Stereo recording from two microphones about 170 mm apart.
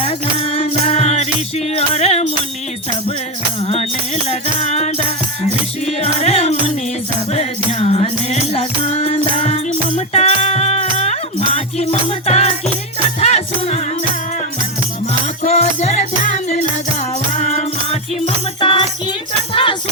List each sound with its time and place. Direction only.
0.0 s music: 35° left (ahead or behind)
3.7 s music: 40° left (ahead or behind)
15.4 s music: 40° left (ahead or behind)
18.6 s music: 30° left (ahead or behind)